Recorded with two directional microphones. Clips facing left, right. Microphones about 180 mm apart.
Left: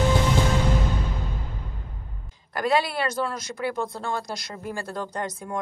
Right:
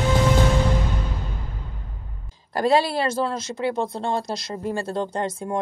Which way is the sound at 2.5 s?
30° right (ahead or behind).